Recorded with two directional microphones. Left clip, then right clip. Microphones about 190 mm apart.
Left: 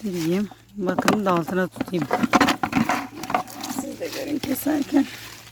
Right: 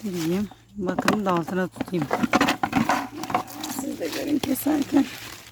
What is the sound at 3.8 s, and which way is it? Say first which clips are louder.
Wild animals: right 1 dB; 40° right (ahead or behind).